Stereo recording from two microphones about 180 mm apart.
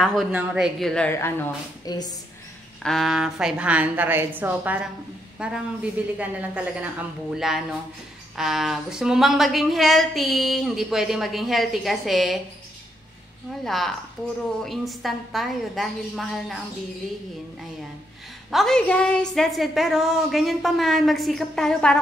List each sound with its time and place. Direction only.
0.0 s speech: centre (ahead or behind)
1.9 s a woman's voice: 20° left (ahead or behind)
2.8 s a woman's voice: centre (ahead or behind)
13.7 s speech: centre (ahead or behind)
18.5 s speech: centre (ahead or behind)